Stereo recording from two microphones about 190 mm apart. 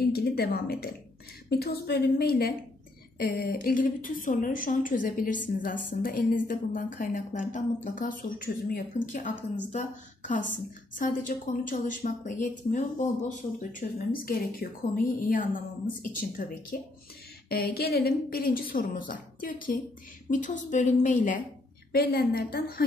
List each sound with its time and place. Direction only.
0.0 s a sound: 55° left (ahead or behind)
1.5 s a woman's voice: 55° left (ahead or behind)
17.5 s a woman's voice: 55° left (ahead or behind)
21.9 s a woman's voice: 55° left (ahead or behind)